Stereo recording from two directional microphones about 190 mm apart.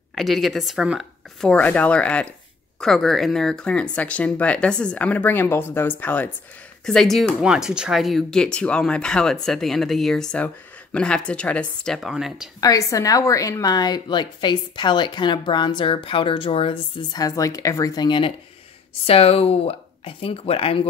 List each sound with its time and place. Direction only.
0.1 s speech: centre (ahead or behind)
12.5 s a woman's voice: 15° left (ahead or behind)